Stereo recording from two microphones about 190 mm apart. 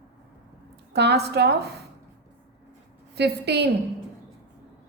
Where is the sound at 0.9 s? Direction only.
60° right (ahead or behind).